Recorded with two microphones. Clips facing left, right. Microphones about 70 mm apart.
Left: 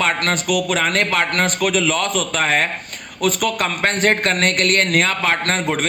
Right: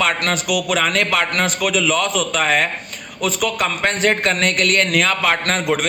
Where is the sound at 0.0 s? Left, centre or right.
Left.